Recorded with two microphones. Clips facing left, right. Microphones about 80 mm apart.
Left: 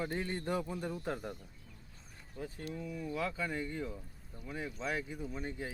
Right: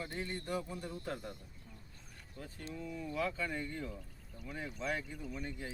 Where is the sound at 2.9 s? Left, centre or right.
Centre.